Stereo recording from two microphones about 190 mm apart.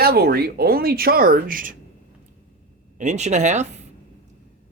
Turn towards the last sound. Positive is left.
turn(degrees=-40)  # may be behind; listen again after turning